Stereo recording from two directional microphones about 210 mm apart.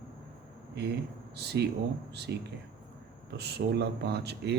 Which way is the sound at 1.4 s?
50° right (ahead or behind).